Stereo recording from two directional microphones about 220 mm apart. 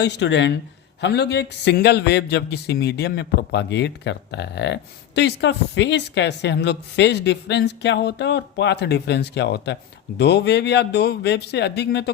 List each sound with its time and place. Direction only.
0.0 s a man's voice: 50° left (ahead or behind)